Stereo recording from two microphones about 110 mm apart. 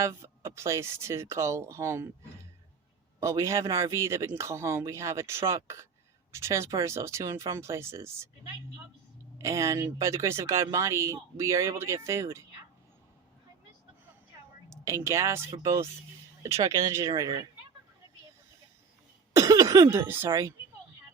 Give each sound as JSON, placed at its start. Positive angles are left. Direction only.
{"t": 0.0, "sound": "speech", "side_deg": -25}
{"t": 3.2, "sound": "speech", "side_deg": -30}
{"t": 9.4, "sound": "speech", "side_deg": -25}
{"t": 14.7, "sound": "speech", "side_deg": -25}
{"t": 19.3, "sound": "speech", "side_deg": -30}